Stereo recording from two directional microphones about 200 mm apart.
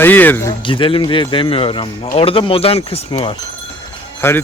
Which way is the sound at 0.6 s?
25° left (ahead or behind).